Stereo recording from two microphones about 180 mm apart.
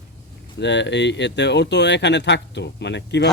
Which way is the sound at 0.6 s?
75° left (ahead or behind).